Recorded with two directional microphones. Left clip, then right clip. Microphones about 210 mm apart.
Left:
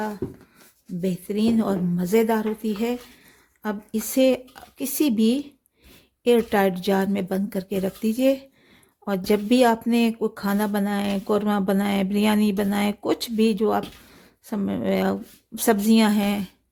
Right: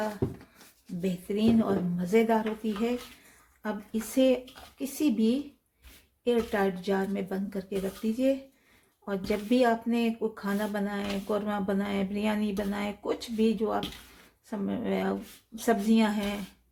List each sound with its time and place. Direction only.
1.0 s speech: 50° left (ahead or behind)
3.6 s speech: 50° left (ahead or behind)